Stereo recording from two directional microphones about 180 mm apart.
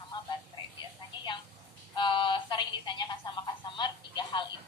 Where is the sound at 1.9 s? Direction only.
25° left (ahead or behind).